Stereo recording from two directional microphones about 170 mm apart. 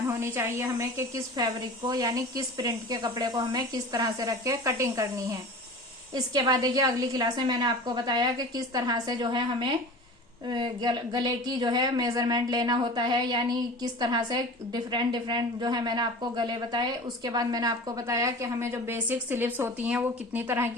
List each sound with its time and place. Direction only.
0.1 s a woman's voice: 15° right (ahead or behind)
6.1 s a woman's voice: 25° right (ahead or behind)